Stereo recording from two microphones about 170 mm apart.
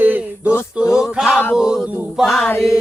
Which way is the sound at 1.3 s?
10° left (ahead or behind).